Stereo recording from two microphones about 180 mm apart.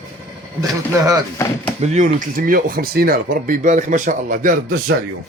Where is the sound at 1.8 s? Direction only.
45° right (ahead or behind).